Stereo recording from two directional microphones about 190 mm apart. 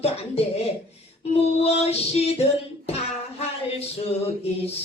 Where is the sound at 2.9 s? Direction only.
35° left (ahead or behind).